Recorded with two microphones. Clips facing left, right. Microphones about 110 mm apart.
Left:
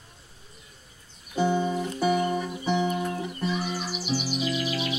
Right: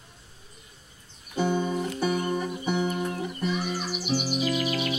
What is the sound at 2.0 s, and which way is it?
Music, 45° right (ahead or behind).